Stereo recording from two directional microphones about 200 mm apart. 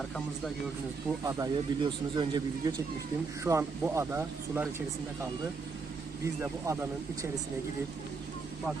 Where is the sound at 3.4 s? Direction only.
10° right (ahead or behind).